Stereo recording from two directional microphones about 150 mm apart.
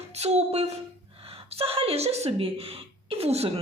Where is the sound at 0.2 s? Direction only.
45° right (ahead or behind).